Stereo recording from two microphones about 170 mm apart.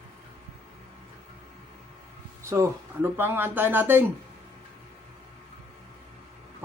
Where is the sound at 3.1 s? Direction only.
15° right (ahead or behind).